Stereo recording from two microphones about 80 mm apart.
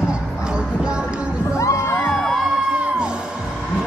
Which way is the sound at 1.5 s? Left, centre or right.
Left.